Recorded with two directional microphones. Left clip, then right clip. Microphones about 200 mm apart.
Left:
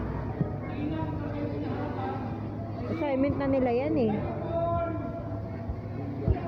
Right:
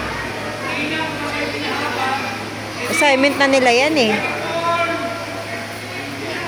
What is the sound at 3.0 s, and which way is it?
A woman's voice, 25° right (ahead or behind).